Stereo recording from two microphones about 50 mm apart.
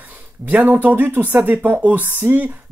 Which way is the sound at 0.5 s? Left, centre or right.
Right.